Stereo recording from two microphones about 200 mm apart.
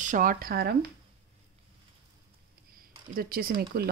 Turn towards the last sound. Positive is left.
turn(degrees=-50)  # may be behind; listen again after turning